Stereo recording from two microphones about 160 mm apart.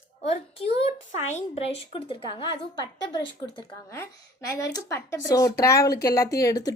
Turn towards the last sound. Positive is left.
turn(degrees=20)  # may be behind; listen again after turning